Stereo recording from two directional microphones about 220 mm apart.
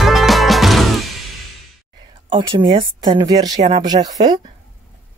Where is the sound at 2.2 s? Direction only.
25° right (ahead or behind).